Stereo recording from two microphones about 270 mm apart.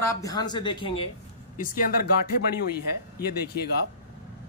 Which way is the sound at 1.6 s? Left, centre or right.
Left.